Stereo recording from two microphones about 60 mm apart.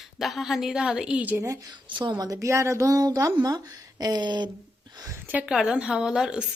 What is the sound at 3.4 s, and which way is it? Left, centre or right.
Speech, right.